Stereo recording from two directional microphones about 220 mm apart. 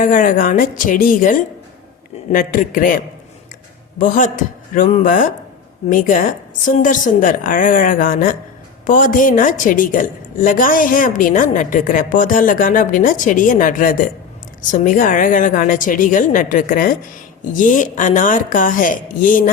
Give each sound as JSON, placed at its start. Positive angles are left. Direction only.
{"t": 0.0, "sound": "a woman's voice", "side_deg": 35}